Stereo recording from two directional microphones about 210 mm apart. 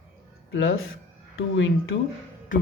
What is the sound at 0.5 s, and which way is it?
Speech, 70° left (ahead or behind).